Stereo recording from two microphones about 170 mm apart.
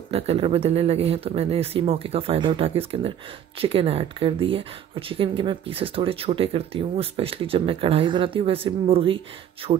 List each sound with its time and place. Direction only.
0.1 s speech: 35° right (ahead or behind)